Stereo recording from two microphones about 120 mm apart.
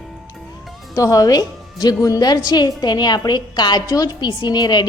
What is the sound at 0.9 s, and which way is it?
A woman's voice, 30° left (ahead or behind).